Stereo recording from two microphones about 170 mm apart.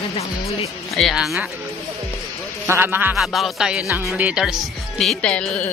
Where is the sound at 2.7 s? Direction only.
10° right (ahead or behind).